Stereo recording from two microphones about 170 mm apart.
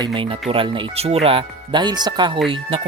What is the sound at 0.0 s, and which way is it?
Speech, 30° right (ahead or behind).